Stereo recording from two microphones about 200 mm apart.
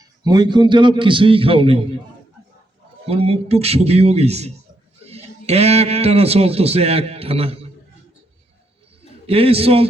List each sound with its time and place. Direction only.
0.3 s a man's voice: 20° right (ahead or behind)
3.1 s a man's voice: 30° right (ahead or behind)
9.2 s a man's voice: 30° right (ahead or behind)